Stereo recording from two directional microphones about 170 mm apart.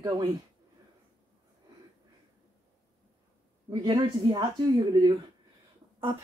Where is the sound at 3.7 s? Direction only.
25° right (ahead or behind).